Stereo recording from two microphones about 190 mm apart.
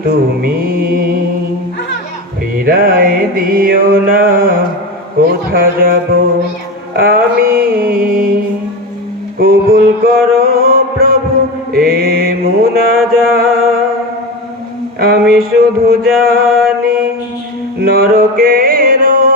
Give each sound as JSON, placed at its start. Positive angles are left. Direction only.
{"t": 0.0, "sound": "mantra", "side_deg": -50}
{"t": 2.6, "sound": "music", "side_deg": -50}
{"t": 9.4, "sound": "mantra", "side_deg": -50}
{"t": 11.7, "sound": "music", "side_deg": -50}
{"t": 14.9, "sound": "music", "side_deg": -50}